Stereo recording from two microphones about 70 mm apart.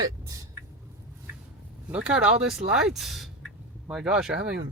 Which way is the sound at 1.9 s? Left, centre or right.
Centre.